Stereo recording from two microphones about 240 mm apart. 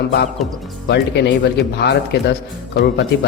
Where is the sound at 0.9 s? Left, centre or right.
Left.